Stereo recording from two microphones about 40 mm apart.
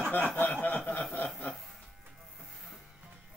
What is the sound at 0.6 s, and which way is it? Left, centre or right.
Snicker, left.